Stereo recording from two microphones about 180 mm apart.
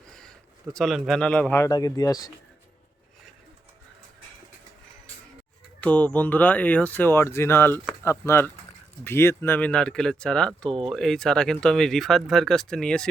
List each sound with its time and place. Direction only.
0.2 s speech: 5° left (ahead or behind); by 2.3 s 20° left (ahead or behind)
5.8 s speech: 5° left (ahead or behind)